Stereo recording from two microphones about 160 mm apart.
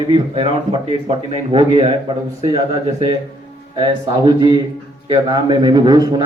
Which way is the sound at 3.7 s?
30° right (ahead or behind).